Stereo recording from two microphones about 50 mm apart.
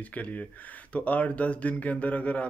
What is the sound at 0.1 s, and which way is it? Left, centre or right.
Speech, left.